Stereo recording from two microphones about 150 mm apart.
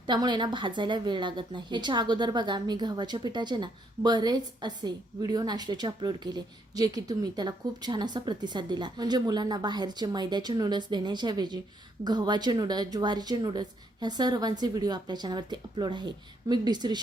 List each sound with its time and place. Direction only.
0.0 s a woman's voice: 30° right (ahead or behind)